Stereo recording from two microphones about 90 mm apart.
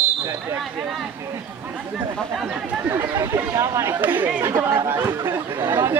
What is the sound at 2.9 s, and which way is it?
Speech, 30° right (ahead or behind).